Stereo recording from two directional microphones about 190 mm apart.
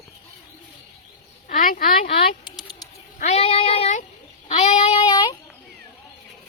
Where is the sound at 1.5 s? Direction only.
45° left (ahead or behind).